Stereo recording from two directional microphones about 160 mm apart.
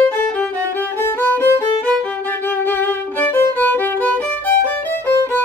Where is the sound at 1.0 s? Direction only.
10° left (ahead or behind).